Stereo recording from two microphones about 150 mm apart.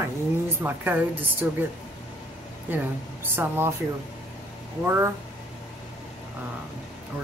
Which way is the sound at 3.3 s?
15° right (ahead or behind).